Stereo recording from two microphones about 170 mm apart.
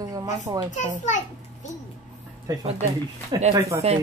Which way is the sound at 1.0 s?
45° left (ahead or behind).